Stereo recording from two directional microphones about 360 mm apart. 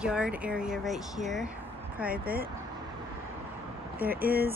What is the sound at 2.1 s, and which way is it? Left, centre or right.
Speech, right.